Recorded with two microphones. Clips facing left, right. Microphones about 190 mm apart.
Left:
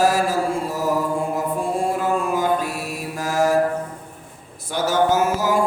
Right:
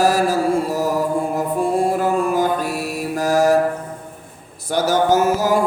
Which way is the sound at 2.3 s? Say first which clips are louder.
Right 2 dB; 35° right (ahead or behind).